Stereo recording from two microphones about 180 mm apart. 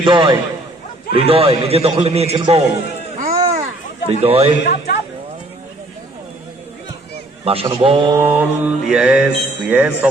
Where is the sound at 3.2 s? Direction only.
50° right (ahead or behind).